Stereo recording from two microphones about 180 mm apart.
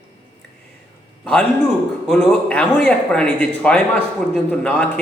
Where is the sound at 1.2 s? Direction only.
5° left (ahead or behind).